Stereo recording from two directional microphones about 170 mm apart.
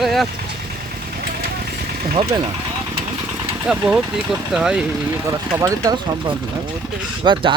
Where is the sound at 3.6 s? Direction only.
5° right (ahead or behind).